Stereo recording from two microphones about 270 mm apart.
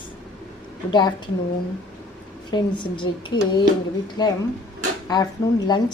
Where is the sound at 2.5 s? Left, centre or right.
Centre.